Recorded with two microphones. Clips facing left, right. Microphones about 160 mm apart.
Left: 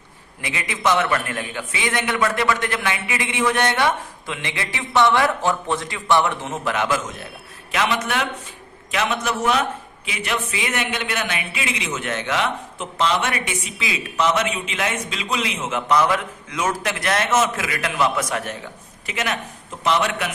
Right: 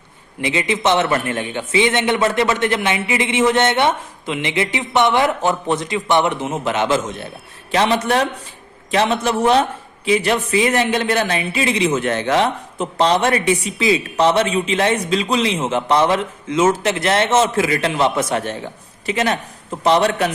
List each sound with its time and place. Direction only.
0.4 s a man's voice: 25° right (ahead or behind)